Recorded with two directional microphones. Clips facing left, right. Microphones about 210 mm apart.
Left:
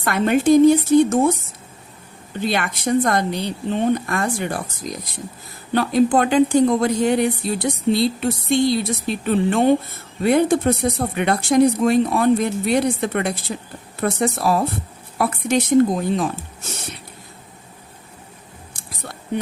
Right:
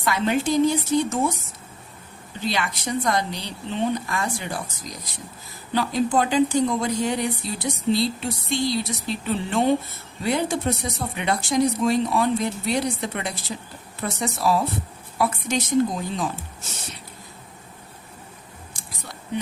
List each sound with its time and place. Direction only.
0.0 s speech: 55° left (ahead or behind)
2.4 s speech: 55° left (ahead or behind)